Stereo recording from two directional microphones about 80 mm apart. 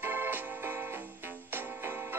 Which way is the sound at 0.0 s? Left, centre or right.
Right.